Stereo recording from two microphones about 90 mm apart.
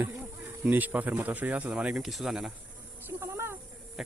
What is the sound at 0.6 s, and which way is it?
Speech, 20° right (ahead or behind).